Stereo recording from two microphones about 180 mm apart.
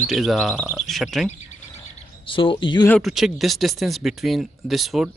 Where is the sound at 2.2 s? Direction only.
30° left (ahead or behind).